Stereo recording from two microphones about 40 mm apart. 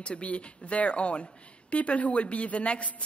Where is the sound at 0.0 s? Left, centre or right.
Left.